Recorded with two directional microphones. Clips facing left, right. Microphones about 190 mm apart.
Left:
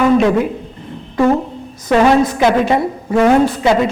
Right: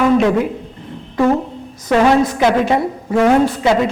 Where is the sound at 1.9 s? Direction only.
20° left (ahead or behind).